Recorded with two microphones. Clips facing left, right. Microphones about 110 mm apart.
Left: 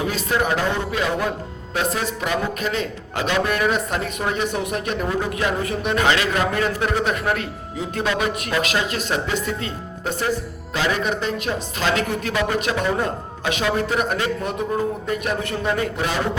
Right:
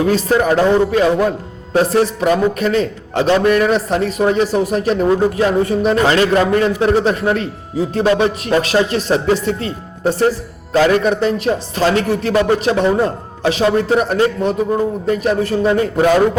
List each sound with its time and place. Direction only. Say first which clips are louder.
0.1 s speech: right 8 dB; 40° right (ahead or behind)
3.4 s speech: right 9 dB; 50° right (ahead or behind)
3.7 s speech: right 7 dB; 35° right (ahead or behind)